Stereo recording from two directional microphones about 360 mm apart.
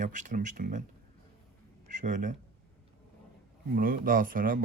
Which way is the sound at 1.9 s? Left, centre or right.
Right.